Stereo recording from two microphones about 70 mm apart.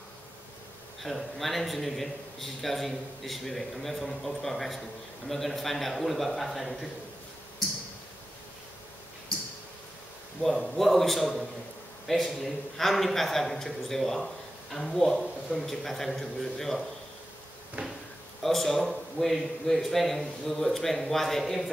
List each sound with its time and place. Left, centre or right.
1.0 s a man's voice: centre
10.4 s a man's voice: centre
17.8 s a sound: centre
18.4 s a man's voice: centre